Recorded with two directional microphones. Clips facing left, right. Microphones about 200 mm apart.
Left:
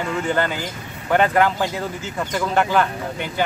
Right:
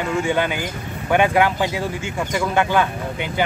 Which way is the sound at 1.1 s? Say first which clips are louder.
Even; 15° right (ahead or behind).